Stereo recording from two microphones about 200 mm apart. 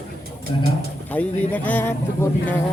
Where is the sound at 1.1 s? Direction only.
10° left (ahead or behind).